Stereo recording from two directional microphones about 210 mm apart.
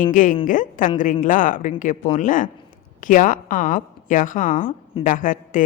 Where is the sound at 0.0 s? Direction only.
40° left (ahead or behind).